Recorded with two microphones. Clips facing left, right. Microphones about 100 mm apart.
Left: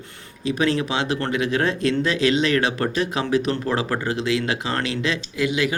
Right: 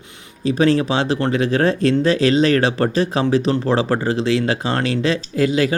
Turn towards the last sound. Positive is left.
turn(degrees=-35)  # may be behind; listen again after turning